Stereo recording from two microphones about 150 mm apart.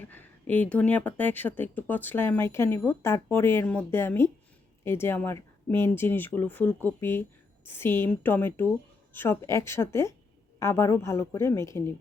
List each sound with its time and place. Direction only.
0.0 s speech: 10° left (ahead or behind)